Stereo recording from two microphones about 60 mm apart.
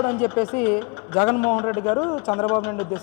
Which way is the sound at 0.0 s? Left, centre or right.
Left.